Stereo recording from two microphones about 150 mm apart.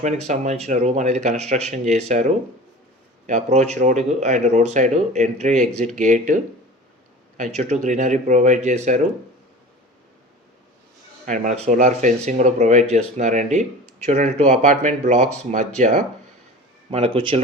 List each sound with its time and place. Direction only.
0.0 s speech: 50° right (ahead or behind)
11.3 s speech: 55° right (ahead or behind)
16.9 s speech: 40° right (ahead or behind)